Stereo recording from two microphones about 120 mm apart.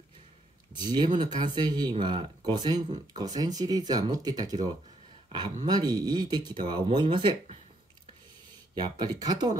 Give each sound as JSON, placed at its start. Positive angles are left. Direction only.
{"t": 0.7, "sound": "speech", "side_deg": -40}
{"t": 5.7, "sound": "speech", "side_deg": -35}
{"t": 8.9, "sound": "speech", "side_deg": -35}